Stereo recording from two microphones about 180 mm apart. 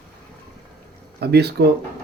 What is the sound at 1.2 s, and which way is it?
Speech, 65° right (ahead or behind).